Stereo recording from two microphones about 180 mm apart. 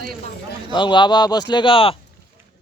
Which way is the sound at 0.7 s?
25° left (ahead or behind).